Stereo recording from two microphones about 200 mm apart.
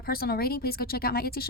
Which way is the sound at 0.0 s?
50° left (ahead or behind).